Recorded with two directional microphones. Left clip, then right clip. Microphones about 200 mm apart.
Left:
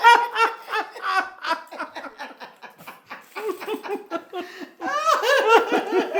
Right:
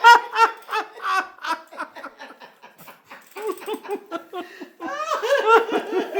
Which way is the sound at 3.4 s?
10° right (ahead or behind).